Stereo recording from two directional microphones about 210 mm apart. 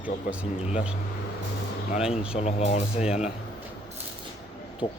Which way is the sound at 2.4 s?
30° left (ahead or behind).